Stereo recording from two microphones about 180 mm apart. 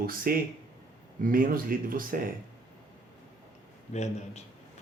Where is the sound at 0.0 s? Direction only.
55° right (ahead or behind).